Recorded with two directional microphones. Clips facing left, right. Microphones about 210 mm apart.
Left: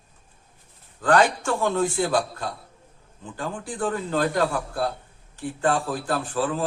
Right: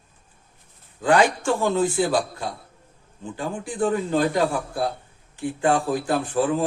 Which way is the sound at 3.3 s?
15° right (ahead or behind).